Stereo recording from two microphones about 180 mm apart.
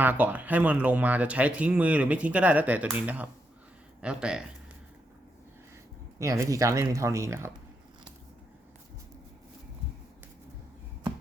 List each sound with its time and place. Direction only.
0.0 s speech: 10° right (ahead or behind)
6.1 s speech: 15° right (ahead or behind)